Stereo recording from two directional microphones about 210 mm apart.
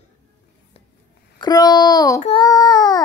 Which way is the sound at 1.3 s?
20° left (ahead or behind).